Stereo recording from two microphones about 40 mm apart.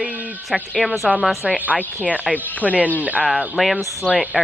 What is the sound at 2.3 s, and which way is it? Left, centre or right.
Speech, centre.